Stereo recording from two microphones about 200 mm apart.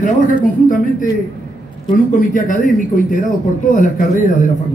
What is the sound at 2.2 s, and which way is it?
A man's voice, 40° left (ahead or behind).